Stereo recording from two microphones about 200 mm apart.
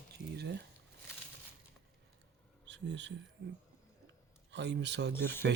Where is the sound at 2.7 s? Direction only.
65° right (ahead or behind).